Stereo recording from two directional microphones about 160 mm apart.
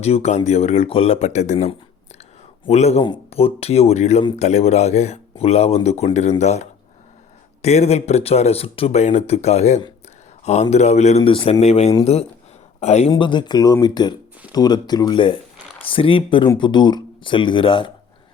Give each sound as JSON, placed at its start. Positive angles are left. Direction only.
{"t": 0.0, "sound": "speech", "side_deg": 45}
{"t": 11.2, "sound": "a man's voice", "side_deg": 35}
{"t": 13.1, "sound": "speech", "side_deg": 30}